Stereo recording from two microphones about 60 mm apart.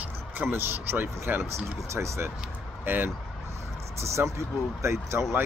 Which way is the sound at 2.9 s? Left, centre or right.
Right.